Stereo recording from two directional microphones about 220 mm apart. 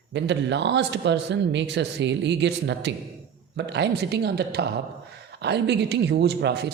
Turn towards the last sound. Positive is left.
turn(degrees=-50)  # may be behind; listen again after turning